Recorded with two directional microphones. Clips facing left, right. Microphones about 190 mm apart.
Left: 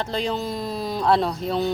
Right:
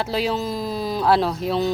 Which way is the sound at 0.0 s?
5° right (ahead or behind).